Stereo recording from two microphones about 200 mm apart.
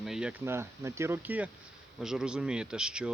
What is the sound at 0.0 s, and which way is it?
Speech, 5° right (ahead or behind).